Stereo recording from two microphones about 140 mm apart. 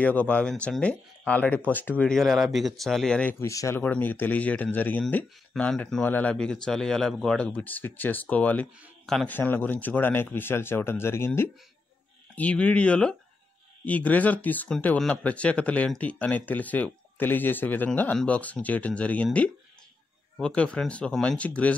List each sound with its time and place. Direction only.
0.0 s speech: 10° left (ahead or behind)
3.3 s speech: 20° left (ahead or behind)
20.3 s speech: 5° left (ahead or behind)